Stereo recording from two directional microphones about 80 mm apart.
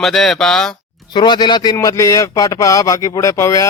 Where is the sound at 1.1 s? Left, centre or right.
Left.